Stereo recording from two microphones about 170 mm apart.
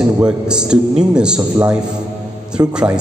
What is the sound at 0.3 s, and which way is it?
A man's voice, 5° right (ahead or behind).